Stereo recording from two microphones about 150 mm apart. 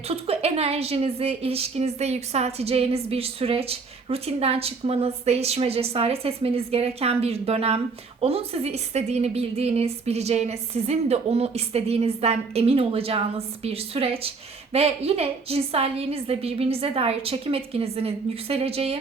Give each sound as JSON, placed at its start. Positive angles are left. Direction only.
{"t": 0.1, "sound": "a woman's voice", "side_deg": -45}